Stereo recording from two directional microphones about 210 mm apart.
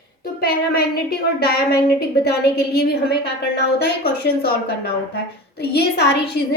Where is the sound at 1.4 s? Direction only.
50° left (ahead or behind).